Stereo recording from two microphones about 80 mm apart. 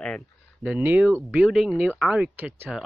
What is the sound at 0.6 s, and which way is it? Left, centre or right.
Speech, centre.